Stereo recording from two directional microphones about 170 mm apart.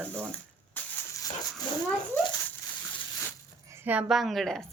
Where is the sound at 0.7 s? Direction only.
20° left (ahead or behind).